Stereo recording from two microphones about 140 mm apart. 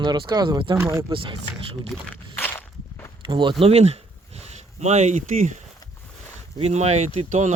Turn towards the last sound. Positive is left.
turn(degrees=-60)  # may be behind; listen again after turning